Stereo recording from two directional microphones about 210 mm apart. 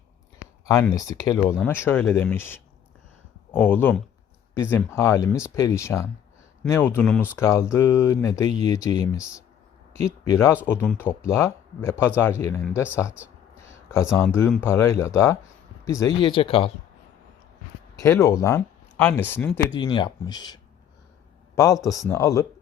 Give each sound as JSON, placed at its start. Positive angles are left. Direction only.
{"t": 0.7, "sound": "speech", "side_deg": 15}
{"t": 17.9, "sound": "speech", "side_deg": 15}
{"t": 19.7, "sound": "speech", "side_deg": 20}